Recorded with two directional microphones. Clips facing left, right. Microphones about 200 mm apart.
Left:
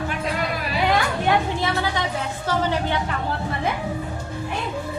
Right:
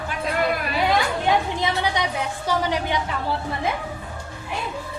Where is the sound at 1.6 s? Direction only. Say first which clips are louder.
Even; 20° right (ahead or behind).